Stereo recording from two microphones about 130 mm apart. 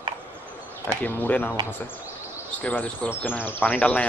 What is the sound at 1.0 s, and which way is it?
Speech, 15° left (ahead or behind).